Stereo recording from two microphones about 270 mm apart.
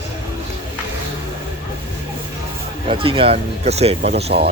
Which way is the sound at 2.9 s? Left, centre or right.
Centre.